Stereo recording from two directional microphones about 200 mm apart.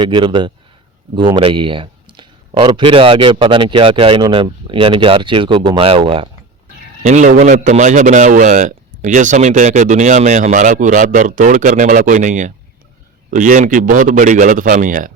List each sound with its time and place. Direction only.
0.0 s a man's voice: 25° right (ahead or behind); by 15.1 s 40° right (ahead or behind)